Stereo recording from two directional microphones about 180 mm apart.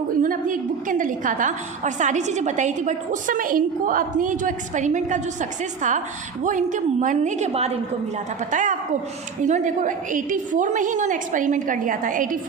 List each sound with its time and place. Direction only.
0.2 s a woman's voice: 50° right (ahead or behind)